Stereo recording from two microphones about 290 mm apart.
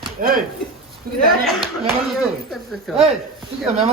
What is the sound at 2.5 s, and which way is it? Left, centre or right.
Speech, centre.